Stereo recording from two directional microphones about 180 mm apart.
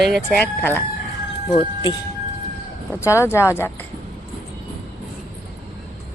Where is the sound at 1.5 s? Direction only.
25° left (ahead or behind).